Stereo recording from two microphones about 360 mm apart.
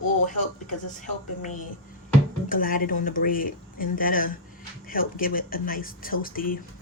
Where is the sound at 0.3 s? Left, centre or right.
Left.